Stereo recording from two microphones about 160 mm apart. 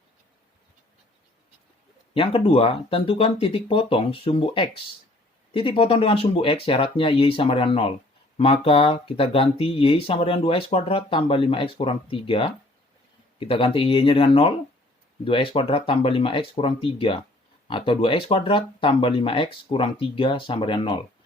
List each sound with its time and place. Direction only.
2.1 s speech: 35° left (ahead or behind)